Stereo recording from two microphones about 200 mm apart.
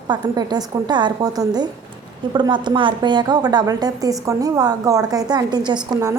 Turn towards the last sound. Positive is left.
turn(degrees=-15)  # may be behind; listen again after turning